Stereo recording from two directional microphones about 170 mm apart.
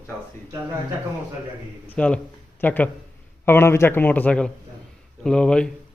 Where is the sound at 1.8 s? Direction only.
5° left (ahead or behind).